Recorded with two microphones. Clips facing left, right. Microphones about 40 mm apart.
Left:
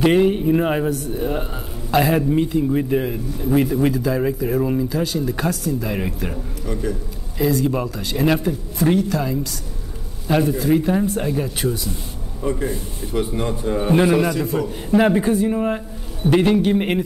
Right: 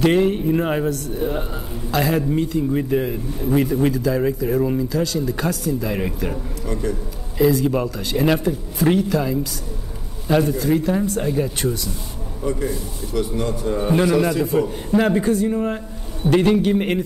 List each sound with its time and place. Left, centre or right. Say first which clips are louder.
0.0 s a man's voice: left 1 dB; centre
12.4 s a man's voice: left 1 dB; left
13.7 s speech: left 2 dB; centre
14.2 s speech: right 1 dB; centre
14.9 s speech: left 3 dB; centre